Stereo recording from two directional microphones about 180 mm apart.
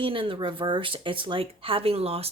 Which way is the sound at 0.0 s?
30° right (ahead or behind).